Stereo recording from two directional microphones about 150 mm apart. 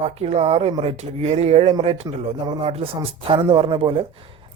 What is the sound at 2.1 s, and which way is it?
Speech, 25° right (ahead or behind).